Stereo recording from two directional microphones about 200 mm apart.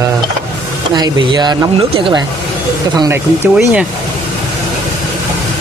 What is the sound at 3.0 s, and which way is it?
Speech, 10° right (ahead or behind).